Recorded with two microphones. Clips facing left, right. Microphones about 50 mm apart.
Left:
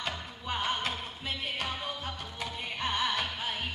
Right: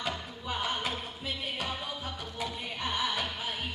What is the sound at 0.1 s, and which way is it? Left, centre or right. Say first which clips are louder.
Music: even; centre.